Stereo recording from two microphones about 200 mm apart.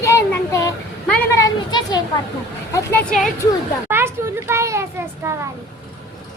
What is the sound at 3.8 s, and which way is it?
A child's voice, 10° right (ahead or behind).